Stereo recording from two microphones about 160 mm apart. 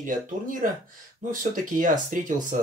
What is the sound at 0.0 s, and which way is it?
Speech, 55° right (ahead or behind).